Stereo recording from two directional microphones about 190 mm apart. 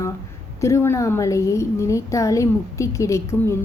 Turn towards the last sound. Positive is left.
turn(degrees=15)  # may be behind; listen again after turning